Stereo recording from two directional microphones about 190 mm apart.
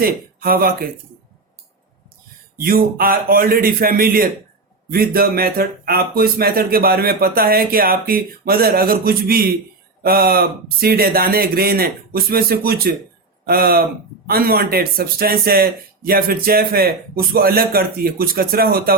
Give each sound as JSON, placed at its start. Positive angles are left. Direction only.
{"t": 0.0, "sound": "speech", "side_deg": -50}
{"t": 2.6, "sound": "speech", "side_deg": -50}